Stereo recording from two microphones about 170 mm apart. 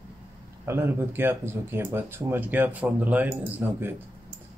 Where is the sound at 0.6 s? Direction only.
15° right (ahead or behind).